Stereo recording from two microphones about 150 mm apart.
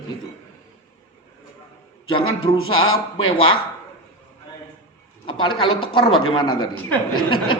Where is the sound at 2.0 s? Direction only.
35° left (ahead or behind).